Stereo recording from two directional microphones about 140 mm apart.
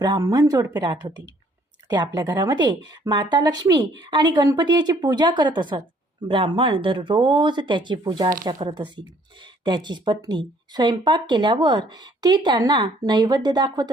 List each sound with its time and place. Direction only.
0.2 s speech: 25° right (ahead or behind)